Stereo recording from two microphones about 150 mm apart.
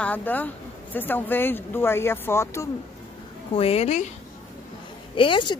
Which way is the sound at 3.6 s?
40° left (ahead or behind).